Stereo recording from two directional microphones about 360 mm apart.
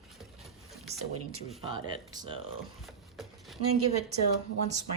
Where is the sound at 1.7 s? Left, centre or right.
Centre.